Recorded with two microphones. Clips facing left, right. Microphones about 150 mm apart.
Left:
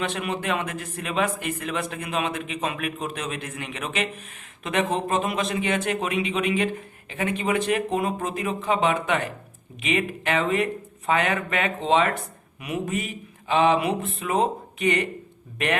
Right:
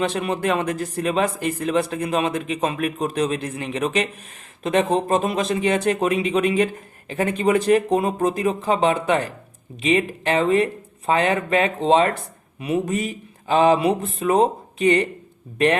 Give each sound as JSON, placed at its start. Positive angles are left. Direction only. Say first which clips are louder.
{"t": 0.0, "sound": "speech", "louder": "right 5 dB", "side_deg": -35}